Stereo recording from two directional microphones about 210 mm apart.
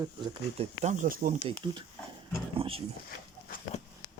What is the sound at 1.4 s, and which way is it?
Speech, 20° right (ahead or behind).